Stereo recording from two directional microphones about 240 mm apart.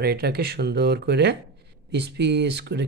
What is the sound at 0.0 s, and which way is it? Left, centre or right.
Speech, right.